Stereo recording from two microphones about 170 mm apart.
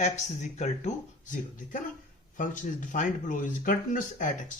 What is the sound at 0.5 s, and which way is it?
Speech, 40° left (ahead or behind).